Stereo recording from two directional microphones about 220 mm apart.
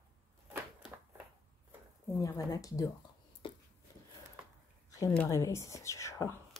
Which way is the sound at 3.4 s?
20° left (ahead or behind).